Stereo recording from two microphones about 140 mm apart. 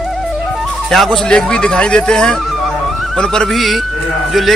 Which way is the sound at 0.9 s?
Centre (ahead or behind).